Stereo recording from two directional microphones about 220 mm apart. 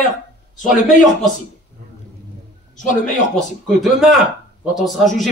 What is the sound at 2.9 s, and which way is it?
Speech, 35° left (ahead or behind).